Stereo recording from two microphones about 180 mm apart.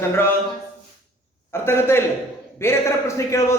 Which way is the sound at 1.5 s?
15° left (ahead or behind).